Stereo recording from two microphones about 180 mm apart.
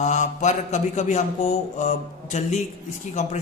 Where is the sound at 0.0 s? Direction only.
40° left (ahead or behind).